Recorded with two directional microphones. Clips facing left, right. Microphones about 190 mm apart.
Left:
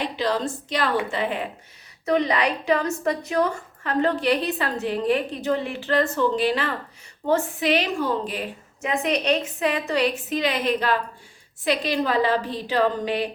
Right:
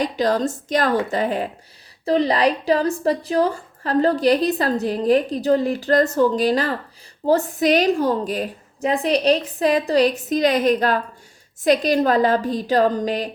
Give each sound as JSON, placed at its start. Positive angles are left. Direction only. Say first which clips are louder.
{"t": 0.0, "sound": "a woman's voice", "louder": "right 5 dB", "side_deg": -45}